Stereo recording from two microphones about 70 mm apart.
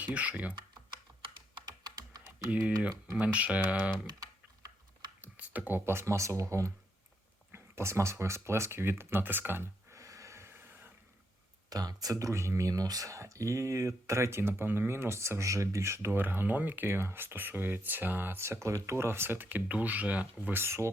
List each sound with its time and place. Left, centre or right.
0.0 s speech: centre
1.6 s computer keyboard: right
2.5 s speech: centre
5.2 s speech: right
9.9 s snort: right
11.7 s speech: right
12.3 s speech: right
16.1 s speech: right